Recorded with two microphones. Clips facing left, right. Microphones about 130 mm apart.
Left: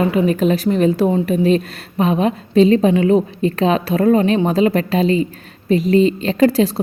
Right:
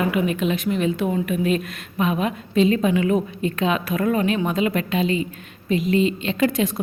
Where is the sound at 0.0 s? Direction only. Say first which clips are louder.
Left 6 dB; 30° left (ahead or behind).